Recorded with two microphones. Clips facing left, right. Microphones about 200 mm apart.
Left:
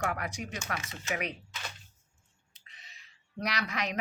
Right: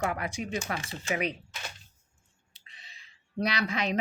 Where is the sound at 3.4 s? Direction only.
30° right (ahead or behind).